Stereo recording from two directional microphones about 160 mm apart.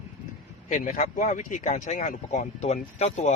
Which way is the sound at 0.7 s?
55° left (ahead or behind).